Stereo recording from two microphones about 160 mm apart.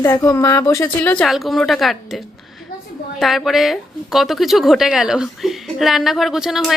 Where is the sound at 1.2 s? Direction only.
Centre (ahead or behind).